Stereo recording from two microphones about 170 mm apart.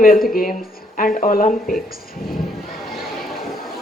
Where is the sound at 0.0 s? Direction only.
55° left (ahead or behind).